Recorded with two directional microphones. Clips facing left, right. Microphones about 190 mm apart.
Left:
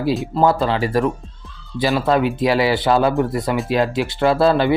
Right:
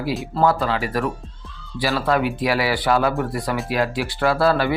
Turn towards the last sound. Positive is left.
turn(degrees=25)  # may be behind; listen again after turning